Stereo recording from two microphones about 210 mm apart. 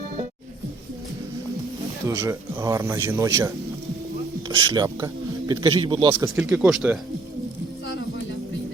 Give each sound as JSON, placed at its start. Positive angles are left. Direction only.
{"t": 2.0, "sound": "speech", "side_deg": -15}
{"t": 6.1, "sound": "speech", "side_deg": -5}